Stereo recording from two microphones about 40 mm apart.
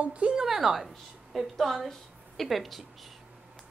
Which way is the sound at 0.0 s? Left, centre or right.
Right.